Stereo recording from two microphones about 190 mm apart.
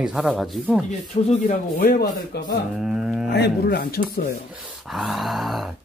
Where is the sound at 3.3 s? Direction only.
60° left (ahead or behind).